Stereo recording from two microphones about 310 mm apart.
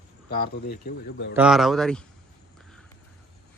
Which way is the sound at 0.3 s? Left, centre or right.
Left.